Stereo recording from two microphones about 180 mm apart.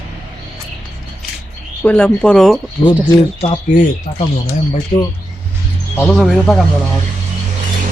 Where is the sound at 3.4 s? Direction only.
40° left (ahead or behind).